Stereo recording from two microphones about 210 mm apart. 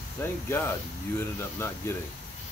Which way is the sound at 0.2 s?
10° left (ahead or behind).